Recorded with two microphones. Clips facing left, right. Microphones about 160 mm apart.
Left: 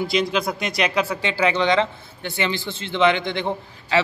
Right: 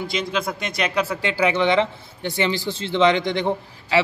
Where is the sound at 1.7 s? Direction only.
25° right (ahead or behind).